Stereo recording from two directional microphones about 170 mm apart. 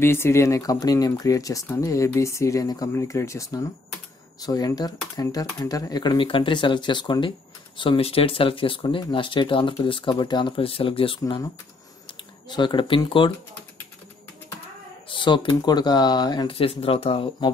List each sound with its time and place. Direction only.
0.0 s speech: 15° left (ahead or behind); by 13.3 s 30° left (ahead or behind)
15.0 s speech: 30° left (ahead or behind)